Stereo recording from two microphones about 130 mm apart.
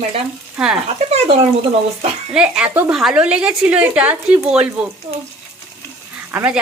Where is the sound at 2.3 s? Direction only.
5° right (ahead or behind).